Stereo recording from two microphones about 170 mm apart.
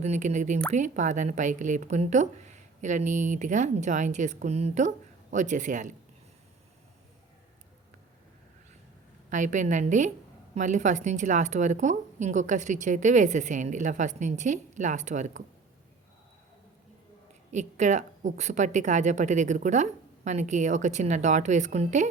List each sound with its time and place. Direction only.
0.0 s a woman's voice: 40° right (ahead or behind)
9.3 s a woman's voice: 45° right (ahead or behind)
17.5 s a woman's voice: 45° right (ahead or behind)